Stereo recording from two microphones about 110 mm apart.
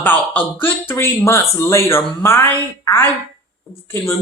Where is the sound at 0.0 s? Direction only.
15° left (ahead or behind).